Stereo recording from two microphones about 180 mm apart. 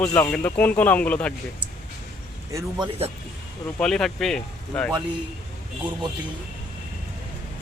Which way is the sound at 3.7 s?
5° left (ahead or behind).